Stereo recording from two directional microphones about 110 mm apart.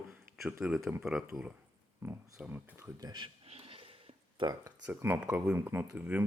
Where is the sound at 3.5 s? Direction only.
60° right (ahead or behind).